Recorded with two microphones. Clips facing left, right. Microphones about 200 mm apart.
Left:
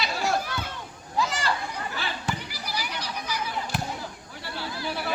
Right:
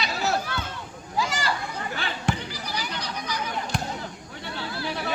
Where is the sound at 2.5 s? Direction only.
10° left (ahead or behind).